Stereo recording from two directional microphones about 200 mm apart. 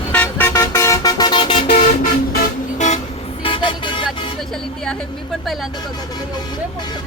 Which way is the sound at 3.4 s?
25° left (ahead or behind).